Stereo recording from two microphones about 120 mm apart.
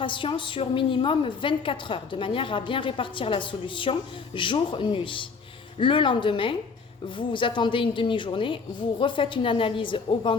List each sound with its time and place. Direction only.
0.0 s a woman's voice: 45° left (ahead or behind)